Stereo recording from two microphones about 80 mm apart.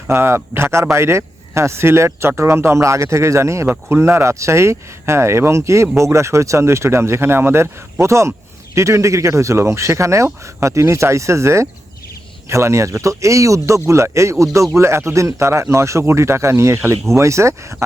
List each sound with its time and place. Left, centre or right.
0.1 s speech: right